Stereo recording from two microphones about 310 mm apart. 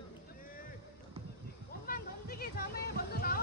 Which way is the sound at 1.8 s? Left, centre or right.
Left.